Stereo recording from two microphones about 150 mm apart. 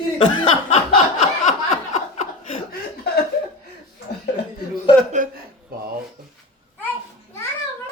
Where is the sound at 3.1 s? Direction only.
90° left.